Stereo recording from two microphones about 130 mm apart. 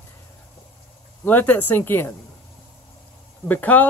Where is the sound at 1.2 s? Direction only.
15° left (ahead or behind).